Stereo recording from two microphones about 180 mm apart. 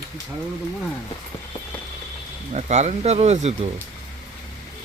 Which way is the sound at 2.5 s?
40° right (ahead or behind).